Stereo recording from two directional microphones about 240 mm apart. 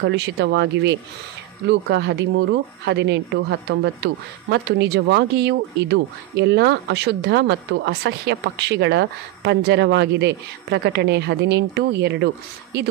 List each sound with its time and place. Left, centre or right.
0.0 s speech: right